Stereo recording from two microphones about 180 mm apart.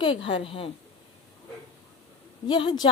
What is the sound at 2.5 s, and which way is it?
Speech, 25° left (ahead or behind).